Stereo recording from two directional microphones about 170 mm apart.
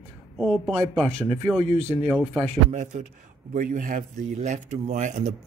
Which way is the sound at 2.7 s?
45° right (ahead or behind).